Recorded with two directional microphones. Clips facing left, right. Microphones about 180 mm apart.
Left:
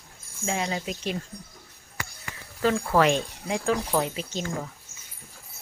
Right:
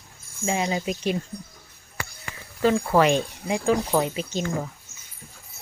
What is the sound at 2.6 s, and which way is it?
Speech, 5° right (ahead or behind).